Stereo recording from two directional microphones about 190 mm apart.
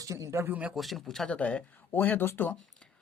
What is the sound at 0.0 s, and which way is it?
Speech, 15° right (ahead or behind).